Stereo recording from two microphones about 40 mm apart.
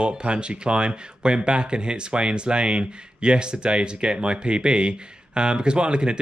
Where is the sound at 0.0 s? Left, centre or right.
Right.